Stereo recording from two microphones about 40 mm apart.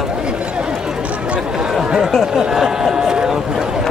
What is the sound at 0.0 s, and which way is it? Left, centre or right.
Chatter, right.